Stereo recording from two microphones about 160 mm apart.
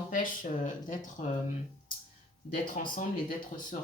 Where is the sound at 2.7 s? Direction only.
55° left (ahead or behind).